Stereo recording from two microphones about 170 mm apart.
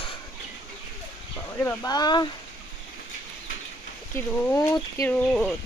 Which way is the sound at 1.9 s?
25° left (ahead or behind).